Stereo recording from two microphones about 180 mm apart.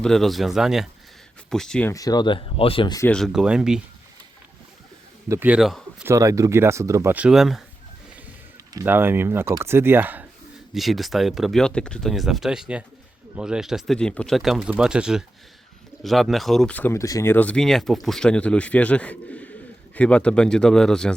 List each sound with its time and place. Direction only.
0.0 s speech: centre (ahead or behind)
1.9 s speech: 20° left (ahead or behind)
3.0 s speech: 5° left (ahead or behind)
5.3 s a man's voice: 10° right (ahead or behind)
6.1 s speech: 15° right (ahead or behind); by 7.6 s centre (ahead or behind)
8.7 s speech: 15° right (ahead or behind); by 21.1 s 5° left (ahead or behind)